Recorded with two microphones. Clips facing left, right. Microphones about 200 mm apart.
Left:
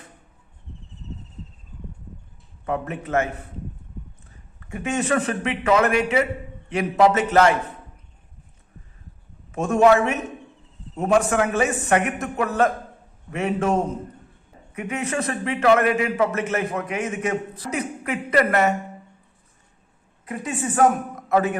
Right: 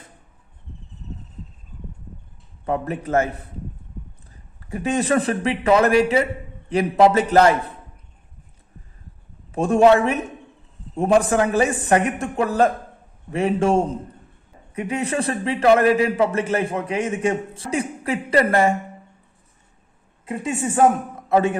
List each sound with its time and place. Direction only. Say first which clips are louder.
2.6 s a man's voice: right 3 dB; 35° right (ahead or behind)
4.7 s a man's voice: right 3 dB; 35° right (ahead or behind)
9.5 s a man's voice: right 2 dB; 30° right (ahead or behind)
20.2 s a woman's voice: right 3 dB; 25° right (ahead or behind)